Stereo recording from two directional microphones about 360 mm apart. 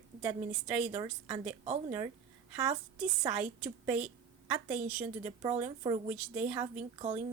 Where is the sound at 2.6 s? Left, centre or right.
Centre.